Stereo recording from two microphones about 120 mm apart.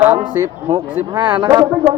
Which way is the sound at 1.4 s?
35° right (ahead or behind).